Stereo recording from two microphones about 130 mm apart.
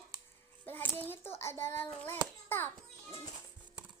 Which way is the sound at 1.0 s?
15° left (ahead or behind).